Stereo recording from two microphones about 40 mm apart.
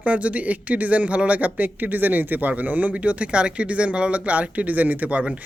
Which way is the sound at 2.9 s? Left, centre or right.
Right.